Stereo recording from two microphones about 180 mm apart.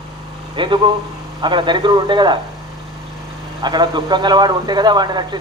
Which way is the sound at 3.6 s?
25° right (ahead or behind).